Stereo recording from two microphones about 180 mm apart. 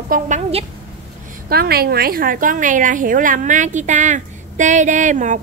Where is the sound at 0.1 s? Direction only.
40° right (ahead or behind).